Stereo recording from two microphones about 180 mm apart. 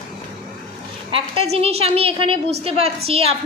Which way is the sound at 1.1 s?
30° right (ahead or behind).